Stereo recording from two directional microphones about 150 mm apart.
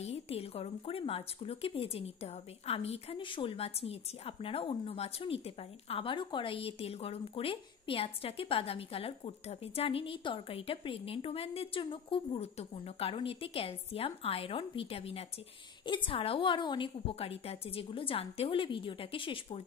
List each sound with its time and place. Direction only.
0.0 s speech: 40° left (ahead or behind)